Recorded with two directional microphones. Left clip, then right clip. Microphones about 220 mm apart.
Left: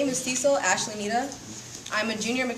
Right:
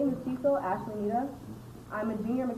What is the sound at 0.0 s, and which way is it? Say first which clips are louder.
A woman's voice: left 5 dB; 35° left (ahead or behind).